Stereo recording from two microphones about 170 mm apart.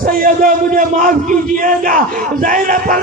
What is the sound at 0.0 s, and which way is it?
A man's voice, 50° right (ahead or behind).